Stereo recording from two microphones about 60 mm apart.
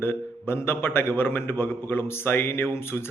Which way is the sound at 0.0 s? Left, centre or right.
Left.